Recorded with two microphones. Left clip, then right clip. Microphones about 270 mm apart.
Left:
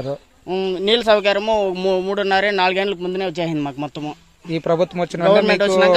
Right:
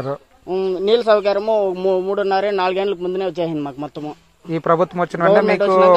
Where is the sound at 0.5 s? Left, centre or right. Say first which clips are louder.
Right 1 dB; left.